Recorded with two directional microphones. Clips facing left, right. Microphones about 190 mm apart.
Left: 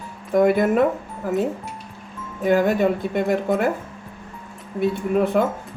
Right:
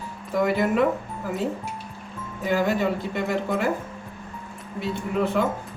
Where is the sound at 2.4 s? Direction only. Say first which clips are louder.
Left 5 dB; 55° left (ahead or behind).